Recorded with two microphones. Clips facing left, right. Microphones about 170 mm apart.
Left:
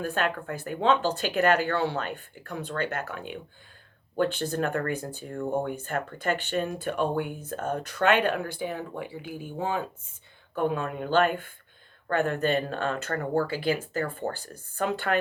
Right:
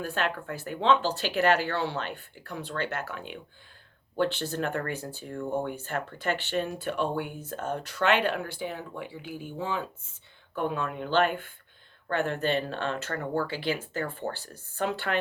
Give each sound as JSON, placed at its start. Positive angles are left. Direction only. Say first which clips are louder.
{"t": 0.0, "sound": "speech", "louder": "left 2 dB", "side_deg": 45}